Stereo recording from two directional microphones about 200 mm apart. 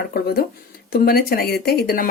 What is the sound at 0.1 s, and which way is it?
Speech, 50° left (ahead or behind).